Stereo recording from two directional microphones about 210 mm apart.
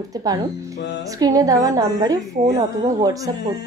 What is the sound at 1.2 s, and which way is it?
A woman's voice, 15° right (ahead or behind).